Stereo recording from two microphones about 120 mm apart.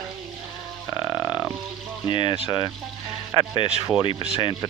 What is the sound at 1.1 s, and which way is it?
Sheep, 10° right (ahead or behind).